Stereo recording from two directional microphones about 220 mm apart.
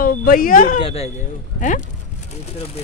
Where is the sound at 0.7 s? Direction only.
25° left (ahead or behind).